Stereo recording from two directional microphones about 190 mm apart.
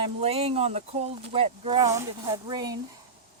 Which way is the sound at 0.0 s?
30° right (ahead or behind).